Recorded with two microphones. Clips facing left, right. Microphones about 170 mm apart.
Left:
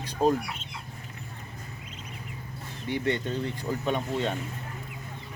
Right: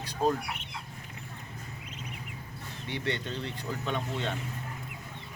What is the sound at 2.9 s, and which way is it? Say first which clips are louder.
Speech: left 6 dB; 45° left (ahead or behind).